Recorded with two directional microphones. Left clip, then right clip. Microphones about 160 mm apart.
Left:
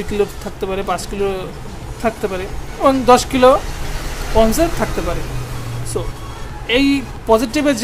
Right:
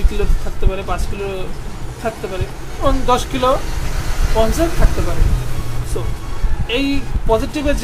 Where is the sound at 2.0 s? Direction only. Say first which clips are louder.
Left 4 dB; 30° left (ahead or behind).